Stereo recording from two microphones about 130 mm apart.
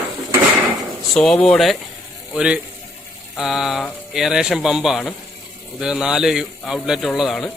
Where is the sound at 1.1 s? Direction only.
5° left (ahead or behind).